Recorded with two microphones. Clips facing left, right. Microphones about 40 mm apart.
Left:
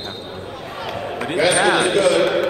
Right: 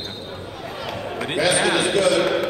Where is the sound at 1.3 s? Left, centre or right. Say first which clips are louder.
Left 3 dB; left.